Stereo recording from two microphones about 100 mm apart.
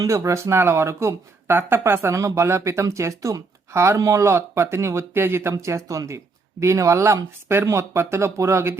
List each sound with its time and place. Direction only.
0.0 s speech: 30° right (ahead or behind)